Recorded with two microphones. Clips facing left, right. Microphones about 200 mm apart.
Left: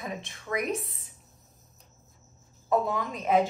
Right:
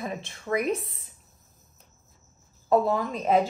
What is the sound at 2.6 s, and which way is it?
Speech, 30° right (ahead or behind).